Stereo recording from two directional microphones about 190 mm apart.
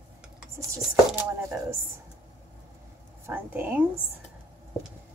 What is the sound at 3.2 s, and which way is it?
Speech, 10° right (ahead or behind).